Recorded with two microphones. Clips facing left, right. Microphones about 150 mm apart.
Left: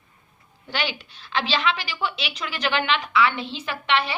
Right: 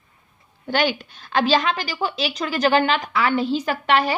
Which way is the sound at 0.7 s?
45° right (ahead or behind).